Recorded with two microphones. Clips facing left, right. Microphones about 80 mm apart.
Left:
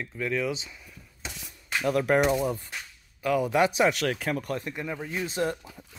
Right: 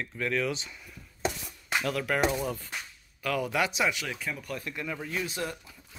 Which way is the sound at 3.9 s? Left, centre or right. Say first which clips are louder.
Left 8 dB; left.